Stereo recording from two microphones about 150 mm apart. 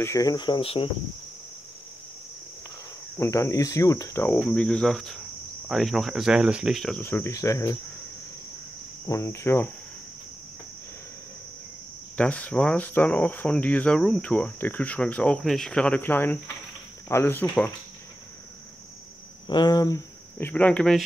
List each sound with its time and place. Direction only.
0.0 s cricket: 20° left (ahead or behind)
3.2 s cricket: 20° left (ahead or behind)
4.4 s speech: 5° left (ahead or behind)
7.0 s cricket: 15° left (ahead or behind)
9.0 s speech: 20° left (ahead or behind)
12.2 s speech: 10° left (ahead or behind)
19.4 s speech: 30° left (ahead or behind); by 21.0 s 5° left (ahead or behind)